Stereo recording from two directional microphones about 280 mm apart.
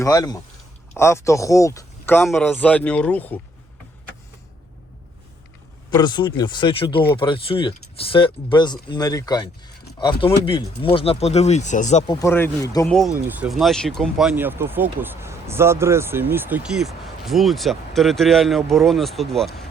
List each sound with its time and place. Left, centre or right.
0.0 s speech: centre
5.9 s speech: centre
12.1 s speech: centre